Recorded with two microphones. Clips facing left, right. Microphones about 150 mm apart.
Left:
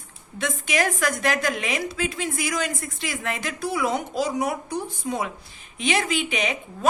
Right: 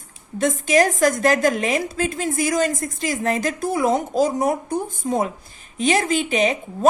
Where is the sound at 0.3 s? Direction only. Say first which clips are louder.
Right 8 dB; 45° right (ahead or behind).